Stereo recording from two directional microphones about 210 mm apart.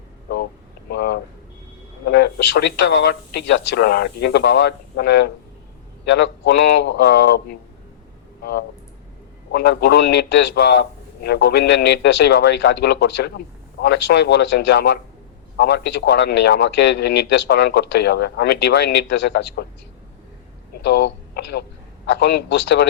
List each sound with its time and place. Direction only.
0.9 s a sound: 50° left (ahead or behind)
2.0 s a man's voice: 50° left (ahead or behind)
20.8 s a man's voice: 55° left (ahead or behind)